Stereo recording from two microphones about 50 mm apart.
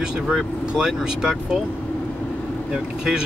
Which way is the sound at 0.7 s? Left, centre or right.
Centre.